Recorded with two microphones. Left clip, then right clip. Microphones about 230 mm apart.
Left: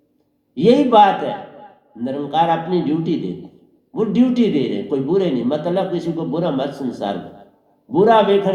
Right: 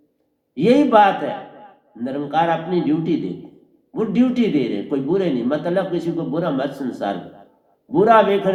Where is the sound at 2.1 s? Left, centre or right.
Right.